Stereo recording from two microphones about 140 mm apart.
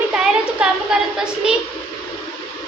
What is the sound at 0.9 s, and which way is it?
Speech, 5° right (ahead or behind).